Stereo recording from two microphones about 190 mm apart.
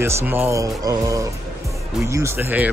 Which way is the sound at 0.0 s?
10° right (ahead or behind).